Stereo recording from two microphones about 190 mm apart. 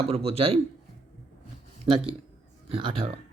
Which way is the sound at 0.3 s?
30° right (ahead or behind).